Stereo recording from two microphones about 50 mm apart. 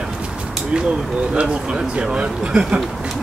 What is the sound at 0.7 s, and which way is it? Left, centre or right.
Speech, centre.